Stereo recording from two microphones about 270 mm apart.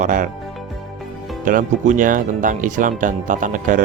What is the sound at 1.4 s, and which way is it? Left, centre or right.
Speech, right.